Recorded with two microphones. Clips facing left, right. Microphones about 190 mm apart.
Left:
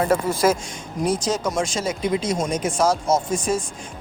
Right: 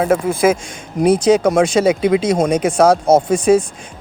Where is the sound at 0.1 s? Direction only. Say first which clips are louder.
Right 5 dB; 55° right (ahead or behind).